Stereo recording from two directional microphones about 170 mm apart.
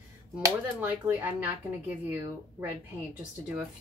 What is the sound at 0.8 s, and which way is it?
Speech, 10° right (ahead or behind).